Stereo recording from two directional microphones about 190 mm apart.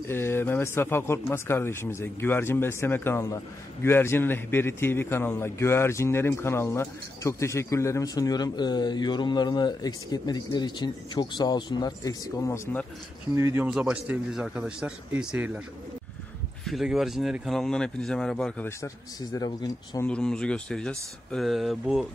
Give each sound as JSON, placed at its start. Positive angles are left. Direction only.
{"t": 0.1, "sound": "a man's voice", "side_deg": 10}
{"t": 13.3, "sound": "speech", "side_deg": -15}
{"t": 13.7, "sound": "speech", "side_deg": -5}
{"t": 16.6, "sound": "speech", "side_deg": 0}
{"t": 19.3, "sound": "speech", "side_deg": 20}
{"t": 20.1, "sound": "speech", "side_deg": 5}